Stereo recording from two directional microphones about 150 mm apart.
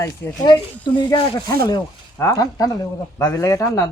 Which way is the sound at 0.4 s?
30° left (ahead or behind).